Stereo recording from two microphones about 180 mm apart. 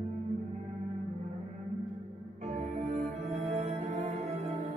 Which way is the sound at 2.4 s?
40° right (ahead or behind).